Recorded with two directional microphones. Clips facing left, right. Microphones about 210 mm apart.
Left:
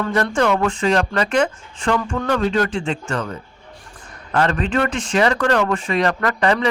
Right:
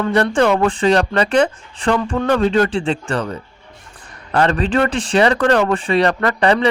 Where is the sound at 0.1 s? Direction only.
30° right (ahead or behind).